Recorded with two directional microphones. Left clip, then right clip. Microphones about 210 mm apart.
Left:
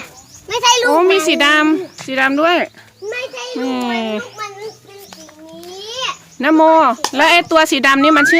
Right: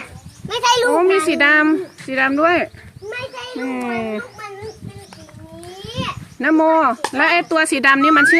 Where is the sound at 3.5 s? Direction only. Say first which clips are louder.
Left 4 dB; 25° left (ahead or behind).